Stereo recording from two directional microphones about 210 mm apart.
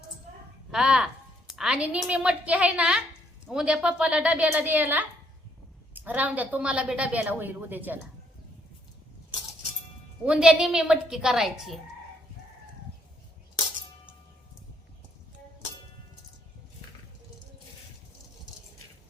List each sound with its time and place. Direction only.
0.7 s a woman's voice: 5° right (ahead or behind)
10.2 s a woman's voice: 5° right (ahead or behind)